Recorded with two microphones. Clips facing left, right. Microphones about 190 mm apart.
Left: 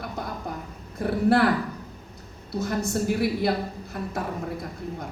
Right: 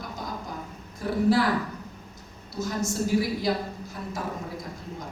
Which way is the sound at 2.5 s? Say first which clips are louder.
Left 2 dB; 60° left (ahead or behind).